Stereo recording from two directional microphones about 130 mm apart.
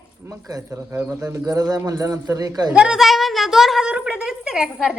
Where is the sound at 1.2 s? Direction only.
30° right (ahead or behind).